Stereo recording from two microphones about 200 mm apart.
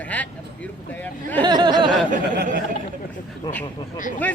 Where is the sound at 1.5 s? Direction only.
20° right (ahead or behind).